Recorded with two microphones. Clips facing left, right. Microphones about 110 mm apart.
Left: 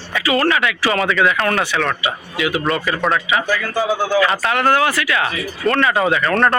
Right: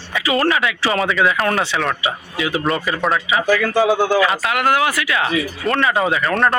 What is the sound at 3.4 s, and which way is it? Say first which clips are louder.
Speech: right 4 dB; 90° right.